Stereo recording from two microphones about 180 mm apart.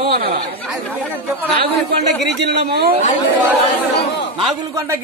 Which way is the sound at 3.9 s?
75° left (ahead or behind).